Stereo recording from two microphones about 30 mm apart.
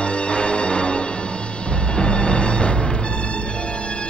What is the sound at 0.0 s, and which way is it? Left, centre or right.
Music, left.